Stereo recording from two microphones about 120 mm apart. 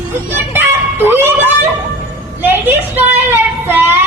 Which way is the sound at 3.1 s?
20° right (ahead or behind).